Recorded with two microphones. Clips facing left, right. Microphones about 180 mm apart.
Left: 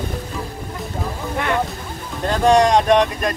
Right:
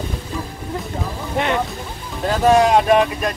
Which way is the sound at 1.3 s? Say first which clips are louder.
Right 2 dB; 20° right (ahead or behind).